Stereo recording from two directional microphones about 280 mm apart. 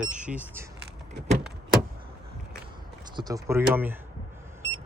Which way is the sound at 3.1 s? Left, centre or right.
Centre.